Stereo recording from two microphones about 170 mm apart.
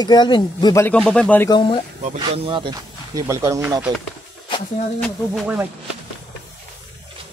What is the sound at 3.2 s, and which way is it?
Speech, 15° right (ahead or behind).